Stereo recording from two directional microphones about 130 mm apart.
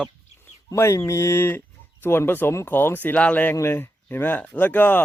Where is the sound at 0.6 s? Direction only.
20° left (ahead or behind).